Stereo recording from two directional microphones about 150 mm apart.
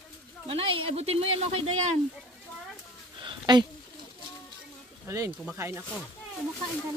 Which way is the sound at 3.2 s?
30° right (ahead or behind).